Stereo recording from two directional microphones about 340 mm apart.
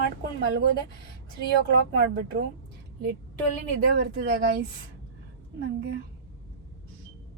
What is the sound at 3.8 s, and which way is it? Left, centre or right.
Speech, right.